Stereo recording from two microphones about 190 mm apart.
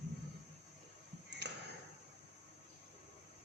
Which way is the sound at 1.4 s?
60° right (ahead or behind).